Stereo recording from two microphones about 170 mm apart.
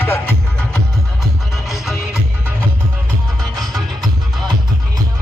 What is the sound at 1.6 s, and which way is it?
Music, centre (ahead or behind).